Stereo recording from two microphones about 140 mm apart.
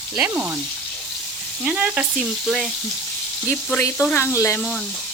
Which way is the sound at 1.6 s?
10° right (ahead or behind).